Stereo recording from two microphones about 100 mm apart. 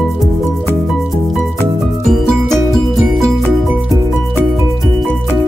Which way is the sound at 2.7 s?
Centre (ahead or behind).